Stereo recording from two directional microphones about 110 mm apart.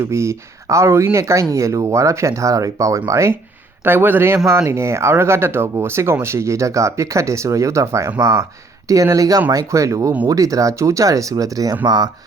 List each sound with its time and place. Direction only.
0.0 s speech: 25° right (ahead or behind)